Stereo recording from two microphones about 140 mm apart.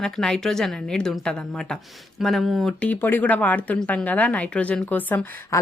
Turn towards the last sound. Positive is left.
turn(degrees=10)  # may be behind; listen again after turning